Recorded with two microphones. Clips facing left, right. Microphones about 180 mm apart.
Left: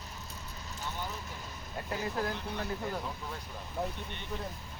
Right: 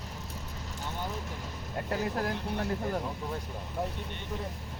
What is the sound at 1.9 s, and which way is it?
Speech, 55° right (ahead or behind).